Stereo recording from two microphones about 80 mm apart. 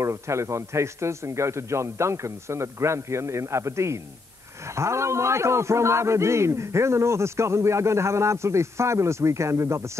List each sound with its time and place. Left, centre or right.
0.0 s a man's voice: right